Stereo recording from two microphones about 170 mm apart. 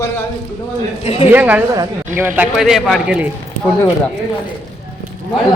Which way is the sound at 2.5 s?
Centre (ahead or behind).